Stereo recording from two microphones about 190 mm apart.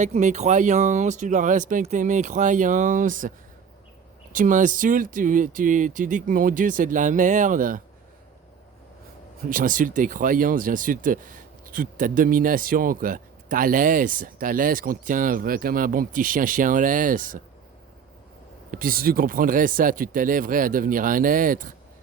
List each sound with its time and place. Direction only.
0.0 s speech: 40° right (ahead or behind)
9.5 s speech: 45° right (ahead or behind)
18.7 s speech: 50° right (ahead or behind)